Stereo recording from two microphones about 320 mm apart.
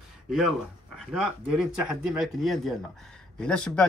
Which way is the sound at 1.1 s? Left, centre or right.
Centre.